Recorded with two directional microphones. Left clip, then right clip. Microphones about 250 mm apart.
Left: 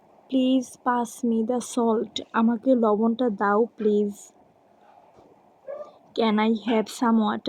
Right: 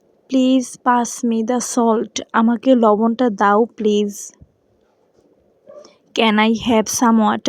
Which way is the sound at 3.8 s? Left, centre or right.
Right.